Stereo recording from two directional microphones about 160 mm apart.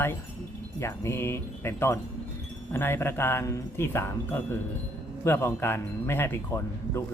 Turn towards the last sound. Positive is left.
turn(degrees=15)  # may be behind; listen again after turning